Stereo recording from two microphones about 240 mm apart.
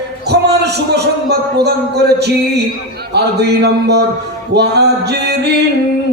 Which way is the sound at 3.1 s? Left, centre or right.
Right.